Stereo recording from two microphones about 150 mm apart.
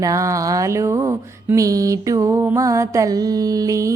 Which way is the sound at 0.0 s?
20° right (ahead or behind).